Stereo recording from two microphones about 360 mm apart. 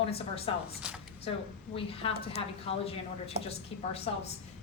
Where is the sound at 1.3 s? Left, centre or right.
Centre.